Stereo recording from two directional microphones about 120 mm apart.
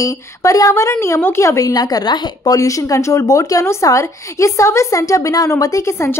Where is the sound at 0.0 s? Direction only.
25° left (ahead or behind).